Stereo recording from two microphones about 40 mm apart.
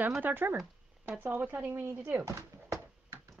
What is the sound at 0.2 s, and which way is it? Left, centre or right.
A woman's voice, right.